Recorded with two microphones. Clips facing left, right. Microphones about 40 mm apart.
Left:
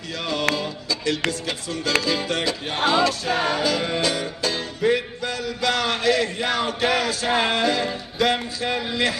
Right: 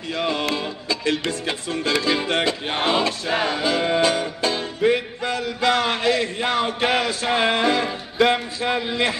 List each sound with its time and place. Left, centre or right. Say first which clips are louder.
0.1 s music: right 1 dB; right